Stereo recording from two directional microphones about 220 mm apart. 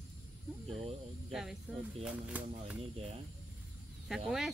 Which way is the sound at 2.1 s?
5° right (ahead or behind).